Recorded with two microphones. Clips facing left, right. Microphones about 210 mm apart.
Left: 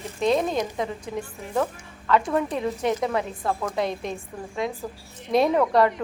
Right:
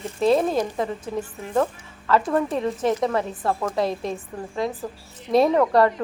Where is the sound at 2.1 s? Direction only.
Centre (ahead or behind).